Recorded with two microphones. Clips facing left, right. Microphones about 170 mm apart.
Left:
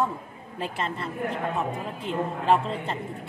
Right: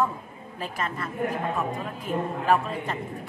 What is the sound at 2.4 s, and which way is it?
Speech, 25° left (ahead or behind).